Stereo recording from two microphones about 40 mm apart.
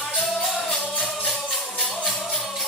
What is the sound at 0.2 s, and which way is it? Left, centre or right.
Music, centre.